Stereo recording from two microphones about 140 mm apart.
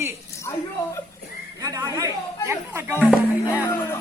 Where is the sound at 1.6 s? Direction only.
25° right (ahead or behind).